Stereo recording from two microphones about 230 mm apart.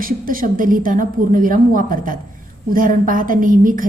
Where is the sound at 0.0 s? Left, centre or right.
Right.